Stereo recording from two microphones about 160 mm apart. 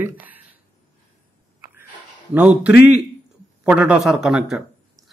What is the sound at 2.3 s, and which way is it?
A man's voice, 10° right (ahead or behind).